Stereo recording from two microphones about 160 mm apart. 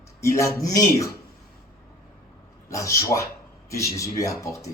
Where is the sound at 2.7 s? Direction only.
20° left (ahead or behind).